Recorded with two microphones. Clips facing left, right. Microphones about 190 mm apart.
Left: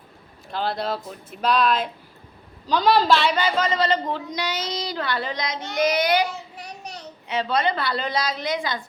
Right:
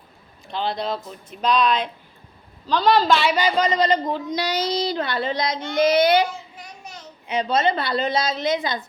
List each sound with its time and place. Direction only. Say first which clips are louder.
0.4 s a woman's voice: even; 5° left (ahead or behind)
3.2 s speech: right 2 dB; 10° right (ahead or behind)
4.3 s a woman's voice: right 5 dB; 35° right (ahead or behind)
6.6 s child singing: left 3 dB; 35° left (ahead or behind)
7.3 s a woman's voice: right 2 dB; 20° right (ahead or behind)